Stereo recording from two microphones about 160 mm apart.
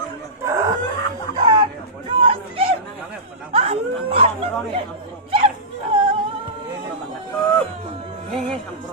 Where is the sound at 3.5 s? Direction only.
40° right (ahead or behind).